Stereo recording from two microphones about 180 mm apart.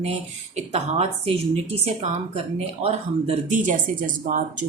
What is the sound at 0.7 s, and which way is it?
Speech, 35° right (ahead or behind).